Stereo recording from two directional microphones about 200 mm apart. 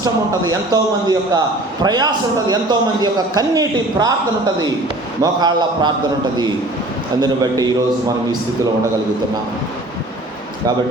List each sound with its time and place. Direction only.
0.7 s a man's voice: 20° right (ahead or behind)
5.2 s a man's voice: 20° right (ahead or behind)
7.2 s a man's voice: 20° right (ahead or behind)